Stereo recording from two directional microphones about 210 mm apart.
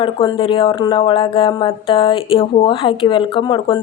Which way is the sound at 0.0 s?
25° left (ahead or behind).